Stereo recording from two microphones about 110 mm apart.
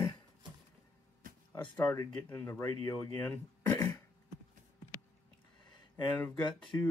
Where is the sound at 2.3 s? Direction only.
20° left (ahead or behind).